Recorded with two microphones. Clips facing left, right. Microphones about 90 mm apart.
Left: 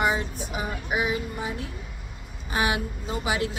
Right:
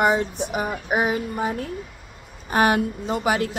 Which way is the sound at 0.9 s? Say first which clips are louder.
Right 4 dB; 45° right (ahead or behind).